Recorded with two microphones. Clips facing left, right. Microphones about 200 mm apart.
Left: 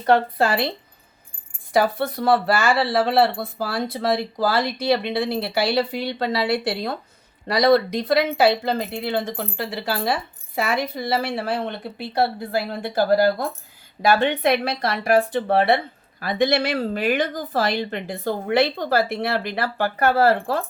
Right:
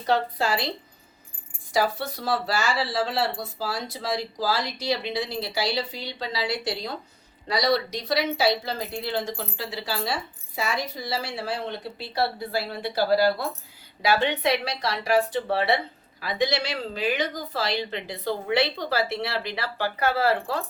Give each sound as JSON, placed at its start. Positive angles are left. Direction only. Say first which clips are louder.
{"t": 0.0, "sound": "speech", "louder": "left 6 dB", "side_deg": 55}
{"t": 1.7, "sound": "a woman's voice", "louder": "left 5 dB", "side_deg": 55}